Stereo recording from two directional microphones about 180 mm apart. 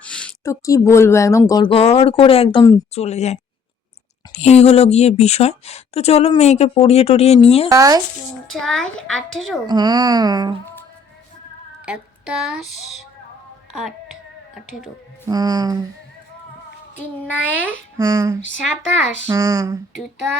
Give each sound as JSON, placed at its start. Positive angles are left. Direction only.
{"t": 0.0, "sound": "a sound", "side_deg": 5}
{"t": 0.4, "sound": "speech", "side_deg": 15}
{"t": 7.7, "sound": "speech", "side_deg": -20}
{"t": 8.4, "sound": "a woman's voice", "side_deg": 5}
{"t": 9.6, "sound": "speech", "side_deg": -25}
{"t": 11.9, "sound": "speech", "side_deg": -5}
{"t": 15.3, "sound": "speech", "side_deg": -20}
{"t": 16.9, "sound": "speech", "side_deg": 10}
{"t": 17.9, "sound": "speech", "side_deg": -20}